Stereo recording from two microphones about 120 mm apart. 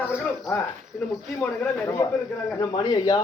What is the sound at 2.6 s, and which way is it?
Speech, 30° left (ahead or behind).